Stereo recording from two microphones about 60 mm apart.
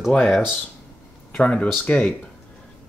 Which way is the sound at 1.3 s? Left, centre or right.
Centre.